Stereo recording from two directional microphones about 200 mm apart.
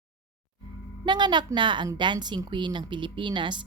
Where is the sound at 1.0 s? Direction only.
20° right (ahead or behind).